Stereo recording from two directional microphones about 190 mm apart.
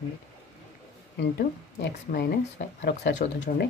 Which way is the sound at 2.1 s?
55° left (ahead or behind).